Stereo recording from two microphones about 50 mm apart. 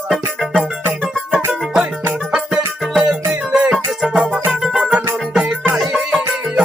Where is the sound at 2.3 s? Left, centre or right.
Centre.